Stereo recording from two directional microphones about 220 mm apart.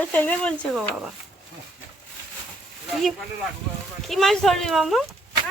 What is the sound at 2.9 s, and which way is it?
A woman's voice, centre (ahead or behind).